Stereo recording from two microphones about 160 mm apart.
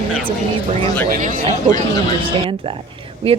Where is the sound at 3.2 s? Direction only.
35° right (ahead or behind).